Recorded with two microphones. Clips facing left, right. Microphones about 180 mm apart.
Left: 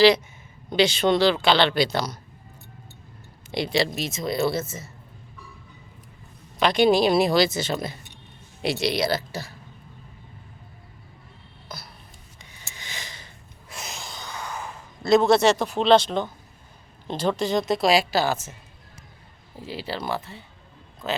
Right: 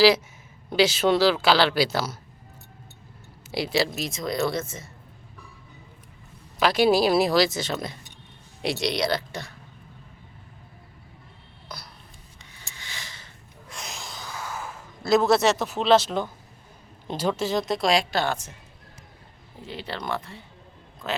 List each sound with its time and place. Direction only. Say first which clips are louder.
0.7 s a woman's voice: even; 5° right (ahead or behind)
3.5 s a woman's voice: left 1 dB; 5° right (ahead or behind)
6.6 s a woman's voice: left 1 dB; 5° right (ahead or behind)
12.5 s a sound: left 2 dB; 15° left (ahead or behind)
13.7 s a sound: left 1 dB; centre (ahead or behind)
17.1 s a woman's voice: left 2 dB; 10° right (ahead or behind)
19.6 s a woman's voice: left 2 dB; 5° left (ahead or behind)